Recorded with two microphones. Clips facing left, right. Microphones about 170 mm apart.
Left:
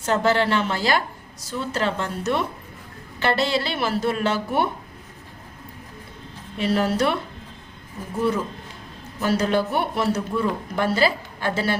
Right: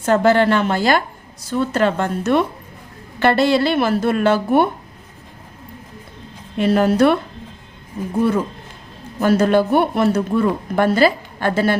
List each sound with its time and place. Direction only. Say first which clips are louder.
0.0 s a woman's voice: right 6 dB; 55° right (ahead or behind)
6.6 s a woman's voice: right 7 dB; 50° right (ahead or behind)
9.2 s a woman's voice: right 7 dB; 55° right (ahead or behind)